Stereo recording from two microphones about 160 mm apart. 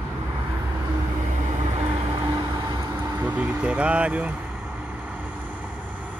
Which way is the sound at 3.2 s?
10° right (ahead or behind).